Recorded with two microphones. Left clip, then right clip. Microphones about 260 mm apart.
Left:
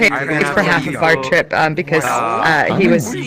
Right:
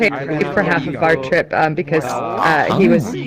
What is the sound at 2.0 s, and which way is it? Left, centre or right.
Speech, left.